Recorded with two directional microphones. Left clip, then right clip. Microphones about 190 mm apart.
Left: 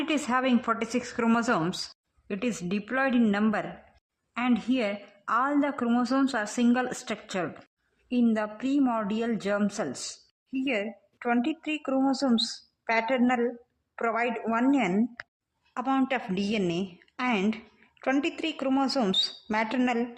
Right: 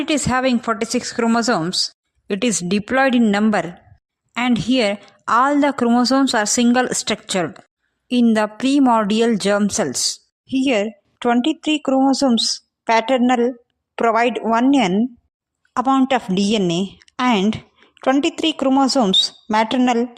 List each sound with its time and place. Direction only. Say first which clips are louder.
0.1 s a woman's voice: right 8 dB; 35° right (ahead or behind)
2.2 s a woman's voice: right 11 dB; 40° right (ahead or behind)
10.6 s a woman's voice: right 11 dB; 50° right (ahead or behind)